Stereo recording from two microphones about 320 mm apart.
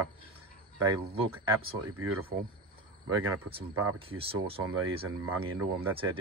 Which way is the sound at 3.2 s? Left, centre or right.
Right.